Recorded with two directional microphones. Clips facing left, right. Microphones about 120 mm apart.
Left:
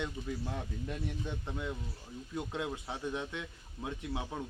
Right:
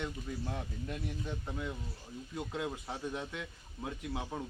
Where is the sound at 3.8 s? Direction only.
15° left (ahead or behind).